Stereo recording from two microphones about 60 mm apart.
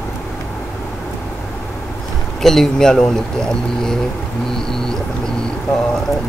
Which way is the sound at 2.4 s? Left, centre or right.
Centre.